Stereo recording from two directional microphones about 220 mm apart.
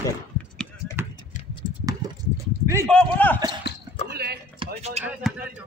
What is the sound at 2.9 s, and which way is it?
Speech, 5° left (ahead or behind).